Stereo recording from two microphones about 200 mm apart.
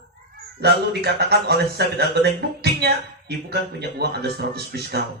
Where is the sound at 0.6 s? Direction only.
55° right (ahead or behind).